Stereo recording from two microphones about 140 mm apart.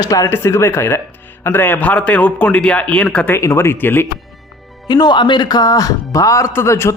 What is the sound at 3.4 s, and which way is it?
Speech, 20° left (ahead or behind).